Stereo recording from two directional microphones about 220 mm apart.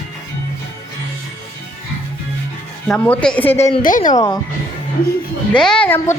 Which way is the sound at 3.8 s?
35° left (ahead or behind).